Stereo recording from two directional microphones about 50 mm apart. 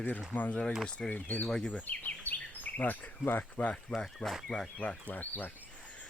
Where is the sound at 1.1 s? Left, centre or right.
Left.